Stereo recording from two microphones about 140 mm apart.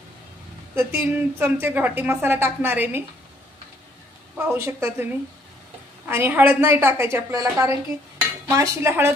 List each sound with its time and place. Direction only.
0.7 s a woman's voice: 15° right (ahead or behind)
4.5 s cutlery: 20° right (ahead or behind)
6.0 s a woman's voice: 15° right (ahead or behind)
8.5 s cutlery: 20° right (ahead or behind)